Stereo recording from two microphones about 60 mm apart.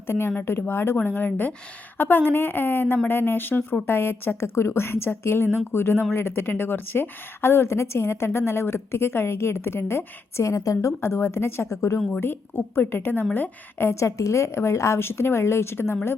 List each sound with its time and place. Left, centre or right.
0.1 s a woman's voice: left
10.4 s a woman's voice: left
12.2 s a woman's voice: left